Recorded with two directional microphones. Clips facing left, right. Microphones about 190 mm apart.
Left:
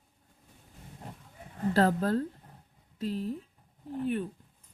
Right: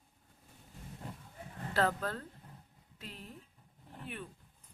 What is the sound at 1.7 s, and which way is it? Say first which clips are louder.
Speech: left 7 dB; 35° left (ahead or behind).